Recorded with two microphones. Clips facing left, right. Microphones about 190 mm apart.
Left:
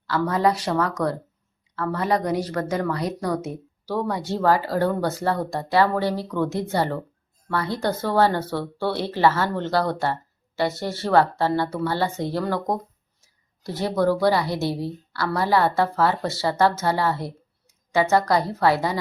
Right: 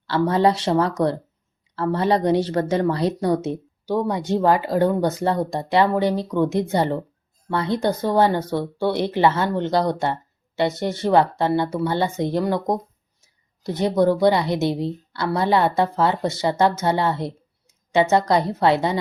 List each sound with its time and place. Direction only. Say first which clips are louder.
0.1 s speech: right 3 dB; 30° right (ahead or behind)